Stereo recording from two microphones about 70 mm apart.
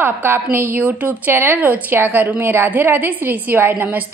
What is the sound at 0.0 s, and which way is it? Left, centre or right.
A woman's voice, right.